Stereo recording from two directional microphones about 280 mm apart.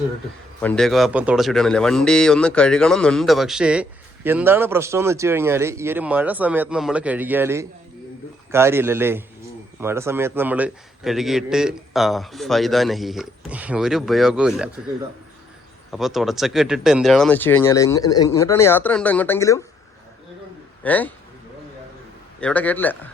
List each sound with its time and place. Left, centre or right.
0.6 s a man's voice: centre
15.9 s speech: centre
20.8 s a man's voice: centre
22.4 s a man's voice: centre